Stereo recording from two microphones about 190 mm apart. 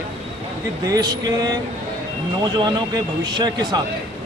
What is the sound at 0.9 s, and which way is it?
Speech, 20° right (ahead or behind).